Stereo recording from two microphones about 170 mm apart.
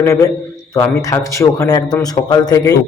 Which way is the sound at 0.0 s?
20° left (ahead or behind).